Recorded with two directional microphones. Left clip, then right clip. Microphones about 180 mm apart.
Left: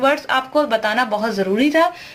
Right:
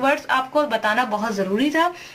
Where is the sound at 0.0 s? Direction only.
20° left (ahead or behind).